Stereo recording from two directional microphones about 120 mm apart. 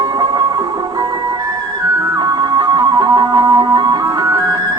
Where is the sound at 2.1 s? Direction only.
35° right (ahead or behind).